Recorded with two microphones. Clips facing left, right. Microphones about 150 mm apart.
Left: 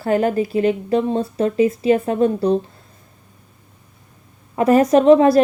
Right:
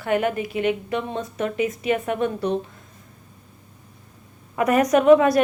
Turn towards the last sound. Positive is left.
turn(degrees=30)  # may be behind; listen again after turning